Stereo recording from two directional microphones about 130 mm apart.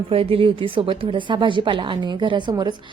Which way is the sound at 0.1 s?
45° right (ahead or behind).